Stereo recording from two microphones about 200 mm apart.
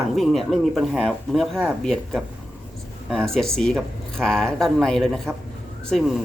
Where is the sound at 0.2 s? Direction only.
Centre (ahead or behind).